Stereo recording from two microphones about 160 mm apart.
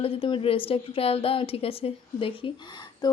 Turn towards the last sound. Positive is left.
turn(degrees=25)  # may be behind; listen again after turning